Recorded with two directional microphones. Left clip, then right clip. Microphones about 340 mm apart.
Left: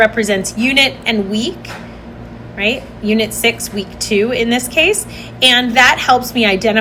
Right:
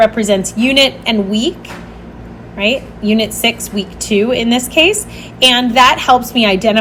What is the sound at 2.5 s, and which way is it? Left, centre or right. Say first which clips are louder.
A woman's voice: right 2 dB; centre.